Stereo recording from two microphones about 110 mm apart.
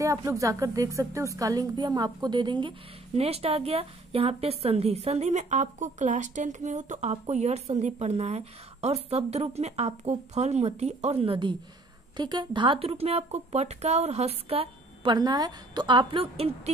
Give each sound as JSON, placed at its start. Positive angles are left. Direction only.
{"t": 0.0, "sound": "a woman's voice", "side_deg": -30}
{"t": 3.2, "sound": "a woman's voice", "side_deg": -65}
{"t": 15.1, "sound": "a woman's voice", "side_deg": -35}